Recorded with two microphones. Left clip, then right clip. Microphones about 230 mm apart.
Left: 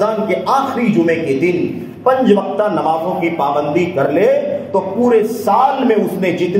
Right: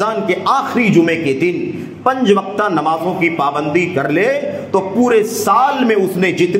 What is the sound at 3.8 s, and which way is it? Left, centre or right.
A man's voice, right.